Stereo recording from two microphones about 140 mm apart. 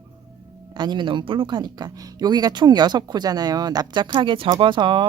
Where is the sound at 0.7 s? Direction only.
30° right (ahead or behind).